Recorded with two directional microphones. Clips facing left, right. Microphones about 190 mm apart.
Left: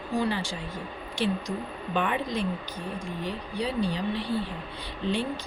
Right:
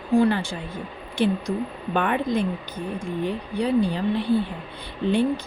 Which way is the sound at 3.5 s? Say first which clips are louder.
Right 7 dB; 55° right (ahead or behind).